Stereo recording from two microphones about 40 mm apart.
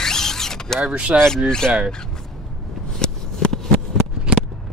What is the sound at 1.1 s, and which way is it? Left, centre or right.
Speech, right.